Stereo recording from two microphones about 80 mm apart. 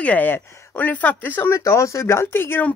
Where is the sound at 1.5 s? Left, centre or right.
Left.